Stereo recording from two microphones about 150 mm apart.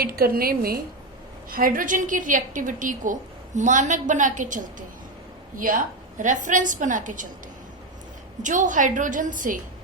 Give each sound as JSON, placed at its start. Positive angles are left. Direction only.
{"t": 0.0, "sound": "a woman's voice", "side_deg": -80}
{"t": 1.5, "sound": "a woman's voice", "side_deg": -70}
{"t": 8.4, "sound": "a woman's voice", "side_deg": -55}